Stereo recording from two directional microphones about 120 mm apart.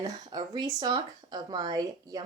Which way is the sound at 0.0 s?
40° right (ahead or behind).